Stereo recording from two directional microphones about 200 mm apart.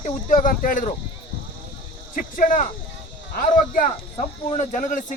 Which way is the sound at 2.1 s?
45° left (ahead or behind).